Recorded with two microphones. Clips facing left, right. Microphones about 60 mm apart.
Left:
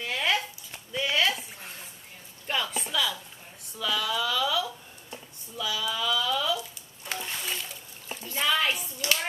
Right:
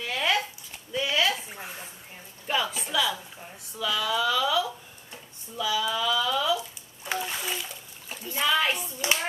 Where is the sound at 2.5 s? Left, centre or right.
Centre.